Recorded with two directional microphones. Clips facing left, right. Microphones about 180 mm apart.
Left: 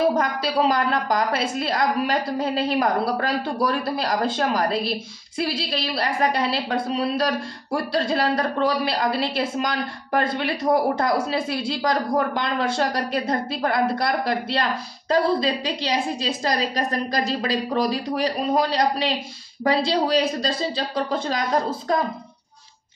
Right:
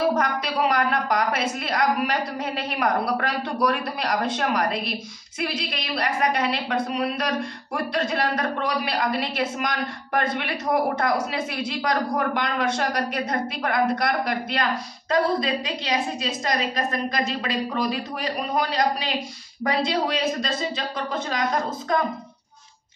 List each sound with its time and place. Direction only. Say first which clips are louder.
0.1 s a woman's voice: left 2 dB; 30° left (ahead or behind)